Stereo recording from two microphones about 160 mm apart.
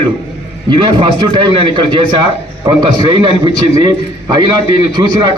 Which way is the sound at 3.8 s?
30° right (ahead or behind).